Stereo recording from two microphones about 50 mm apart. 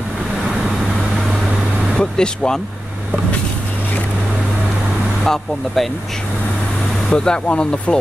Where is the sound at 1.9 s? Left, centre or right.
Centre.